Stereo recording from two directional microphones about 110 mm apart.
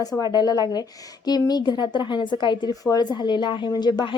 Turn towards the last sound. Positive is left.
turn(degrees=40)  # may be behind; listen again after turning